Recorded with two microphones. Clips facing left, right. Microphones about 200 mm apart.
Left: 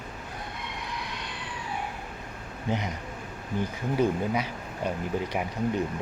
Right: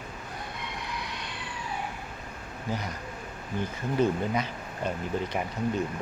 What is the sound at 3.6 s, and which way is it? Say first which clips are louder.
Speech: even; 10° left (ahead or behind).